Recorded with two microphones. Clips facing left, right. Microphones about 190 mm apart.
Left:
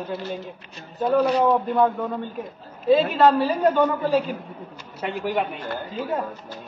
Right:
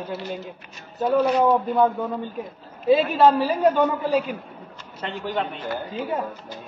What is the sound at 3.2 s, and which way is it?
A man's voice, 10° right (ahead or behind).